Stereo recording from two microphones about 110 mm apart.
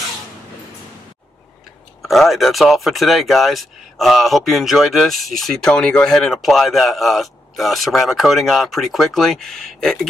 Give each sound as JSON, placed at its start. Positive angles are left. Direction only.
{"t": 2.0, "sound": "speech", "side_deg": 0}